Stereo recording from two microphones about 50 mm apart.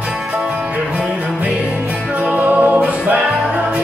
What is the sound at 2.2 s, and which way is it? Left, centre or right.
Music, right.